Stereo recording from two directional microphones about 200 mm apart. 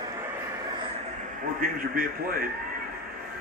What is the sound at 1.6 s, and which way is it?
Speech, 45° right (ahead or behind).